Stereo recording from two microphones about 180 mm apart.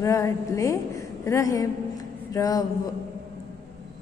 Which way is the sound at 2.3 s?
20° left (ahead or behind).